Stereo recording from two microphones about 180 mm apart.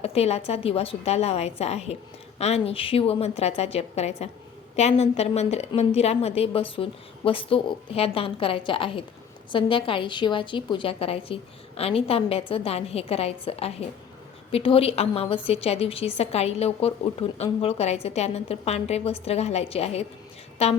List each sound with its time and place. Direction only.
0.0 s a woman's voice: 35° left (ahead or behind)